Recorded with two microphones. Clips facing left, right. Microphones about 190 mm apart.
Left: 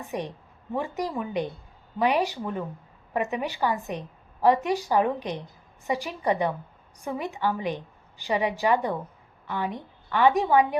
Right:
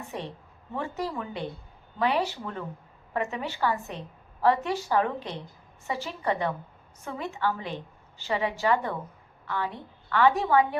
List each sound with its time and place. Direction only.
0.0 s a woman's voice: 15° left (ahead or behind)